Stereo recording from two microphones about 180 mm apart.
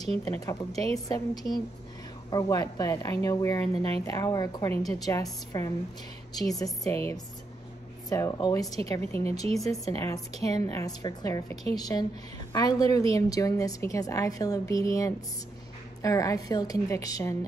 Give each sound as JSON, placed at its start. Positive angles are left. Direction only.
{"t": 0.2, "sound": "a woman's voice", "side_deg": 15}
{"t": 8.1, "sound": "a woman's voice", "side_deg": 15}